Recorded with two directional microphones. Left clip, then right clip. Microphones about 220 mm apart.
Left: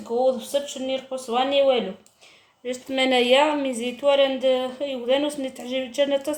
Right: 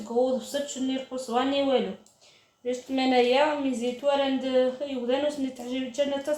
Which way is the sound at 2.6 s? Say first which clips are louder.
Left 4 dB; 45° left (ahead or behind).